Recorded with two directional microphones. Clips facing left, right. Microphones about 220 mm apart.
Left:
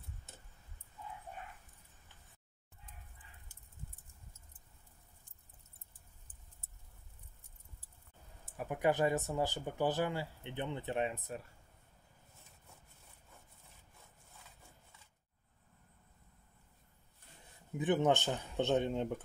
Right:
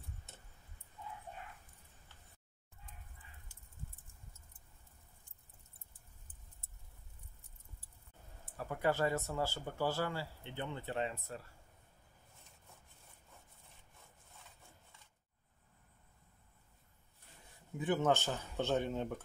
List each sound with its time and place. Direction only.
8.5 s speech: 15° left (ahead or behind)
17.7 s speech: 15° left (ahead or behind)